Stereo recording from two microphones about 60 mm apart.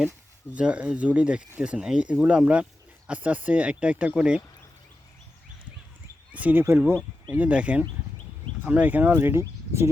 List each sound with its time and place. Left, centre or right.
0.5 s speech: right
6.3 s speech: right
7.3 s speech: right
9.4 s speech: right